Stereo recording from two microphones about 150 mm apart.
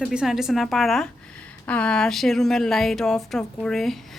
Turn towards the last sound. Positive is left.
turn(degrees=0)  # may be behind; listen again after turning